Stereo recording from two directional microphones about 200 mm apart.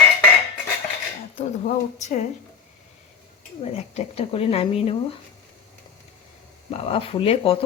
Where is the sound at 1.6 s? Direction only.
35° left (ahead or behind).